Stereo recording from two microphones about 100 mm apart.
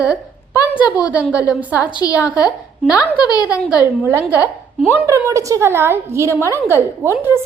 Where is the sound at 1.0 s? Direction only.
15° right (ahead or behind).